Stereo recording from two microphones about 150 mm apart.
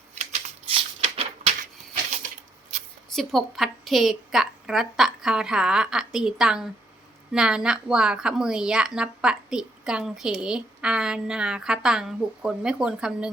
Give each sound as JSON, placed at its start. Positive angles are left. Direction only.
{"t": 0.2, "sound": "shuffling cards", "side_deg": -45}
{"t": 1.0, "sound": "a sound", "side_deg": -40}
{"t": 3.1, "sound": "a woman's voice", "side_deg": 0}